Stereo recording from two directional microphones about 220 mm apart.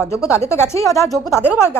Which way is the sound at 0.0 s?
10° left (ahead or behind).